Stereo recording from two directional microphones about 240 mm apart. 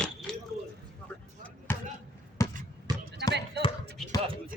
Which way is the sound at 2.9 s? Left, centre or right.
Centre.